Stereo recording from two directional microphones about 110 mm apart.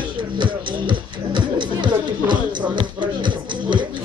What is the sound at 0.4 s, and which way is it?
Music, 45° right (ahead or behind).